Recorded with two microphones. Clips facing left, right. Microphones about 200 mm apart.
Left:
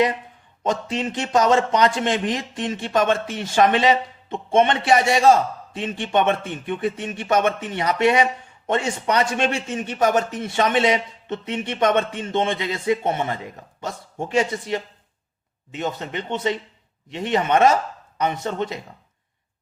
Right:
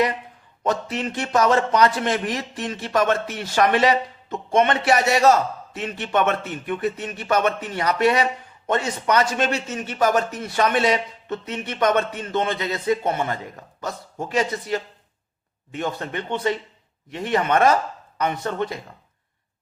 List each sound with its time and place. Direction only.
0.6 s speech: 25° left (ahead or behind)